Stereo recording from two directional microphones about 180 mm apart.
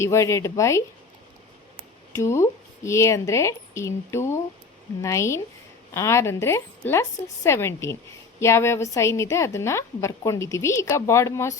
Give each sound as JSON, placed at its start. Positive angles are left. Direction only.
{"t": 0.0, "sound": "a woman's voice", "side_deg": 15}
{"t": 2.1, "sound": "a woman's voice", "side_deg": 15}